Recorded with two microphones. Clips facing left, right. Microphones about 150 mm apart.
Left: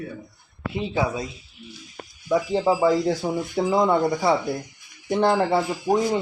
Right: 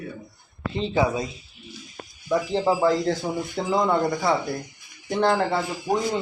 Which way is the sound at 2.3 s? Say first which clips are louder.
Left 1 dB; 5° left (ahead or behind).